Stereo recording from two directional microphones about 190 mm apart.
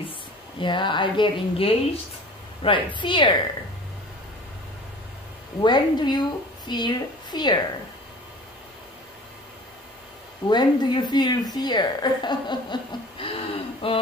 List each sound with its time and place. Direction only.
0.6 s a woman's voice: 25° left (ahead or behind)
5.6 s a woman's voice: 25° left (ahead or behind)
10.5 s a woman's voice: 20° left (ahead or behind)